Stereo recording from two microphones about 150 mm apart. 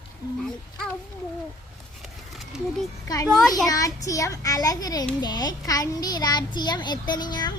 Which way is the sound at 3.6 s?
25° left (ahead or behind).